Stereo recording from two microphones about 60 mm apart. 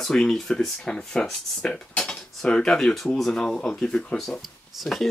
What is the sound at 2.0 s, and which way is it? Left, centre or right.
Speech, centre.